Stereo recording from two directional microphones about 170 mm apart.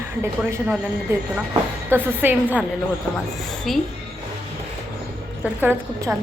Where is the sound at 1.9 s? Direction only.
10° right (ahead or behind).